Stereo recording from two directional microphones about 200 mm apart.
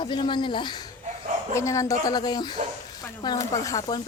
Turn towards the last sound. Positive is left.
turn(degrees=20)  # may be behind; listen again after turning